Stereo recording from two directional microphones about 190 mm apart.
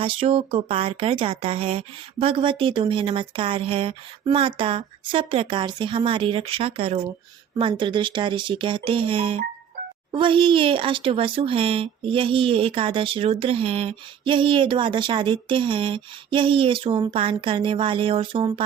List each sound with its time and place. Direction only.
0.0 s speech: 30° right (ahead or behind)